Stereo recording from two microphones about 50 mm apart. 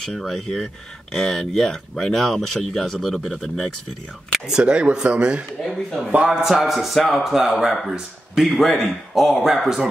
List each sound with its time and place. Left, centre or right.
0.2 s speech: centre
3.4 s speech: centre
4.5 s speech: centre
5.6 s speech: centre